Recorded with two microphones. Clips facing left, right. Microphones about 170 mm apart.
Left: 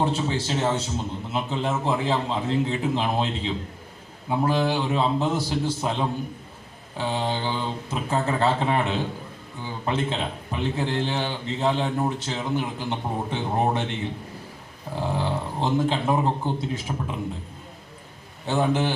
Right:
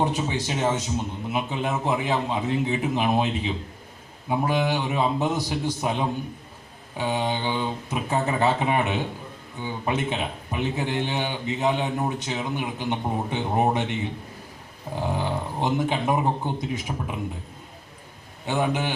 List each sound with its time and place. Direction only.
0.0 s a man's voice: 15° right (ahead or behind)
14.9 s a man's voice: 15° right (ahead or behind)
18.4 s a man's voice: 15° right (ahead or behind)